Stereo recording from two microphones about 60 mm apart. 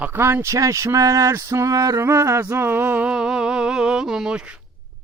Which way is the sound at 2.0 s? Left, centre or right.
Right.